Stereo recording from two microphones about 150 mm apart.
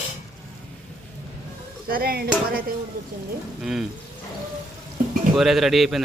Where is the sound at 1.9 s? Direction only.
85° right.